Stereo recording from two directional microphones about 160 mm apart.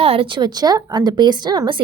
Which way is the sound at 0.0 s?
35° right (ahead or behind).